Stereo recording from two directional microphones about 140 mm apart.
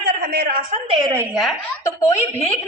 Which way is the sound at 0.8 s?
40° right (ahead or behind).